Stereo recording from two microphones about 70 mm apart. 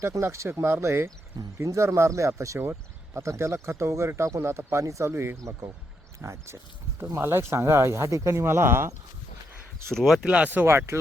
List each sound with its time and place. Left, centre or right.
0.0 s speech: right
5.1 s speech: right
5.4 s speech: right
9.9 s speech: centre
10.2 s speech: centre
10.5 s speech: right